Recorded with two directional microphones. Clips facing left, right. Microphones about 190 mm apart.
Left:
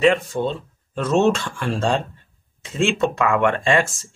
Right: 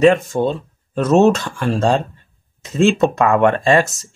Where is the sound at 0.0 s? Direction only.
45° right (ahead or behind).